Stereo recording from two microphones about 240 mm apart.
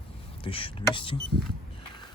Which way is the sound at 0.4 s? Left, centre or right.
Left.